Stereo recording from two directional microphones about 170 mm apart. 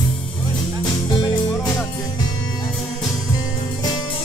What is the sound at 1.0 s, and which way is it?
Music, 25° left (ahead or behind).